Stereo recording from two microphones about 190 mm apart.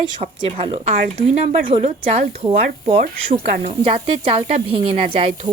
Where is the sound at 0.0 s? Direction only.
30° right (ahead or behind).